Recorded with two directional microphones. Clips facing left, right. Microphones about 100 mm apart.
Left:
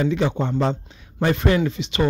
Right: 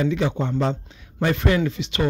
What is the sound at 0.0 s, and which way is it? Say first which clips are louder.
Speech: left 1 dB; 30° left (ahead or behind).